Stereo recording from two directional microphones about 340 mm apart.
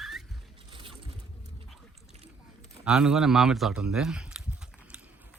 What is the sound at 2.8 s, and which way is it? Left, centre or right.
Speech, centre.